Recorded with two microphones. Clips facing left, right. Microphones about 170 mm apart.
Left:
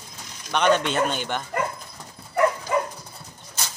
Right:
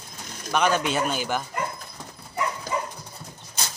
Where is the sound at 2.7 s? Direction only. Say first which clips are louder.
Left 5 dB; 60° left (ahead or behind).